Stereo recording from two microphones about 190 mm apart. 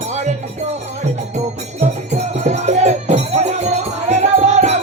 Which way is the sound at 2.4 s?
35° right (ahead or behind).